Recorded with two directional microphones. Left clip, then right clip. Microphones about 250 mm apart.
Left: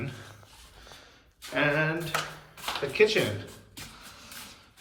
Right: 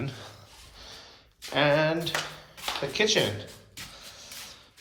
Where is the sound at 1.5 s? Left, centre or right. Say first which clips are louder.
Right 3 dB; centre.